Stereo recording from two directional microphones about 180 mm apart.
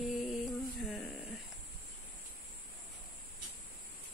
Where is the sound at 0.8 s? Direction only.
Centre (ahead or behind).